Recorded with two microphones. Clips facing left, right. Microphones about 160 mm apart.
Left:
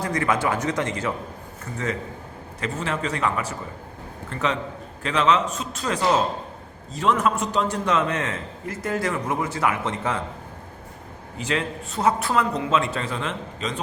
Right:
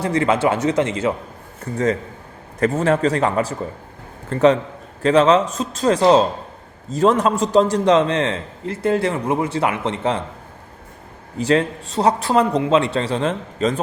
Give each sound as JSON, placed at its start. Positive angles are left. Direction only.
{"t": 0.0, "sound": "a man's voice", "side_deg": -25}
{"t": 2.6, "sound": "a man's voice", "side_deg": -50}
{"t": 11.3, "sound": "a man's voice", "side_deg": -40}